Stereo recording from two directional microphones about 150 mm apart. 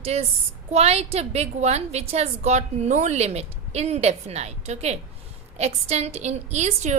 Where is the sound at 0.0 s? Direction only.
45° right (ahead or behind).